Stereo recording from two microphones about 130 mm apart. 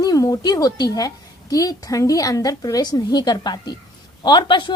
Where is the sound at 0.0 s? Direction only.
30° left (ahead or behind).